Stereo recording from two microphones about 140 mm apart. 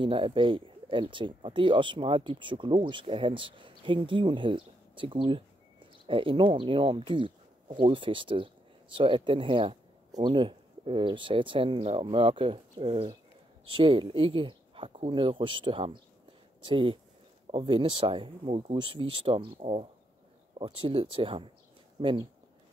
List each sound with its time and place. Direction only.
0.0 s speech: 40° right (ahead or behind)